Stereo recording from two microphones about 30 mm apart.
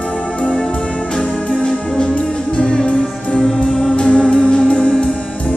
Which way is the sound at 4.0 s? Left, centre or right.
Left.